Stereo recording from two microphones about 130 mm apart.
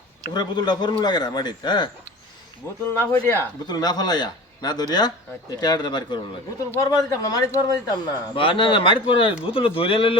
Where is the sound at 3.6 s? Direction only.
30° left (ahead or behind).